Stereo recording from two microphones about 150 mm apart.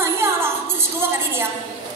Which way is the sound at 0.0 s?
15° right (ahead or behind).